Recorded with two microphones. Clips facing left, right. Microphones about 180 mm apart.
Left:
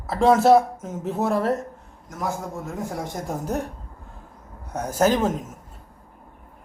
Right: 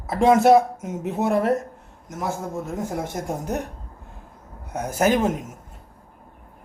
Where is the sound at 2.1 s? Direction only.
20° right (ahead or behind).